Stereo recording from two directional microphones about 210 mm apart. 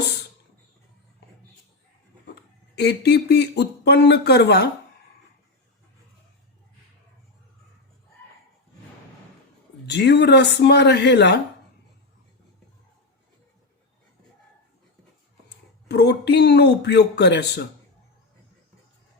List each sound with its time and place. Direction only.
2.3 s speech: 50° left (ahead or behind)
9.8 s speech: 55° left (ahead or behind)
15.9 s speech: 55° left (ahead or behind)